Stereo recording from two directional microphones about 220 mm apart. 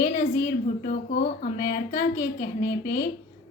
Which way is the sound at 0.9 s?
40° left (ahead or behind).